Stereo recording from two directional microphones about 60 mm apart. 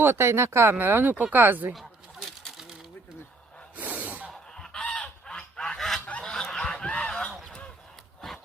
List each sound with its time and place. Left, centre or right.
0.0 s speech: right
1.7 s fowl: centre
3.8 s gasp: right
4.3 s goose: centre
6.1 s snicker: left
6.3 s snicker: centre
6.9 s goose: centre
8.2 s a sound: centre